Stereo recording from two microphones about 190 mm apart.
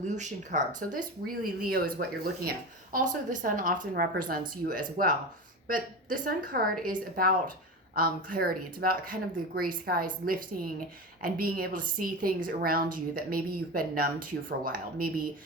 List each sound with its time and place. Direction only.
0.0 s speech: 40° right (ahead or behind)